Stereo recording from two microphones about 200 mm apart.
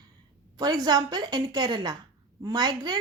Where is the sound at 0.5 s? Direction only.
20° right (ahead or behind).